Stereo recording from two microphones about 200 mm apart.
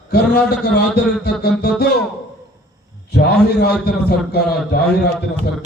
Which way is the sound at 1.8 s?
55° left (ahead or behind).